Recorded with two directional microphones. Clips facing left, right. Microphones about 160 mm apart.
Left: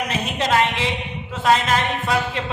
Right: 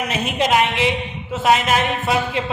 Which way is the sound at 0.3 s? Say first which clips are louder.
Right 2 dB; 15° right (ahead or behind).